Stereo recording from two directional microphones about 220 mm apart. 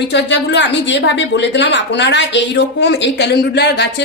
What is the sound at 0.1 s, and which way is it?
A woman's voice, 50° left (ahead or behind).